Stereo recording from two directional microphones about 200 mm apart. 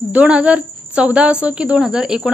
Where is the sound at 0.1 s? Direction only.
5° right (ahead or behind).